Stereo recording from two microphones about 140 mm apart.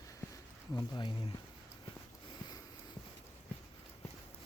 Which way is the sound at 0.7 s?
30° left (ahead or behind).